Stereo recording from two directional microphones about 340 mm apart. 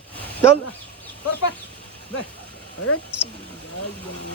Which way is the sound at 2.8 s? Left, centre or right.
Left.